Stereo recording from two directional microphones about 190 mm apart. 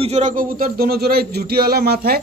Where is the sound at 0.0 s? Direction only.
40° right (ahead or behind).